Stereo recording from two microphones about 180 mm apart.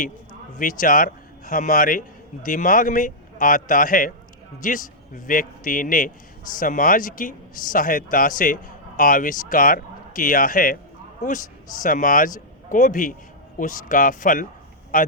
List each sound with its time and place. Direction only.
0.6 s a man's voice: 50° left (ahead or behind)